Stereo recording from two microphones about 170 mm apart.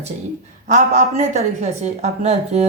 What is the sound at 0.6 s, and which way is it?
A woman's voice, 45° right (ahead or behind).